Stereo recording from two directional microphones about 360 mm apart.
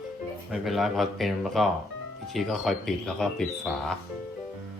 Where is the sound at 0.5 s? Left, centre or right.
Centre.